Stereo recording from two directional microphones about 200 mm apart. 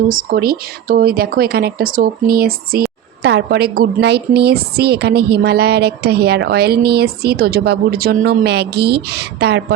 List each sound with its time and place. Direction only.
0.1 s a woman's voice: 45° right (ahead or behind)